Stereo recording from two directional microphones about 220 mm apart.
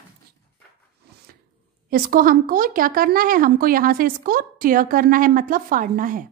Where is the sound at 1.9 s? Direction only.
40° right (ahead or behind).